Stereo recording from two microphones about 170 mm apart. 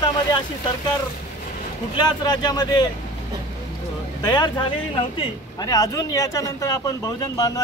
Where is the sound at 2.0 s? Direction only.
25° left (ahead or behind).